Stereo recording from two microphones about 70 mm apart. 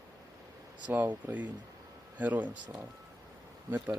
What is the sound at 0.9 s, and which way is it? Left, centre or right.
Speech, right.